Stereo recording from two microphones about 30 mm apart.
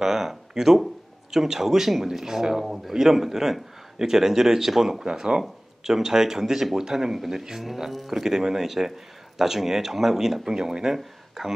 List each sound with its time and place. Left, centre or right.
0.0 s speech: centre
5.0 s speech: right; by 8.2 s centre
8.2 s speech: centre
11.0 s speech: centre